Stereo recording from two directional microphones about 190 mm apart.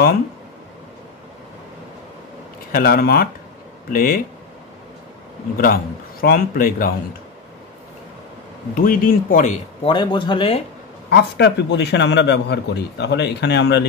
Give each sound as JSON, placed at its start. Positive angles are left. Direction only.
{"t": 2.7, "sound": "speech", "side_deg": 55}
{"t": 6.2, "sound": "speech", "side_deg": 50}
{"t": 8.7, "sound": "speech", "side_deg": 45}
{"t": 9.9, "sound": "speech", "side_deg": 25}
{"t": 11.1, "sound": "a man's voice", "side_deg": 60}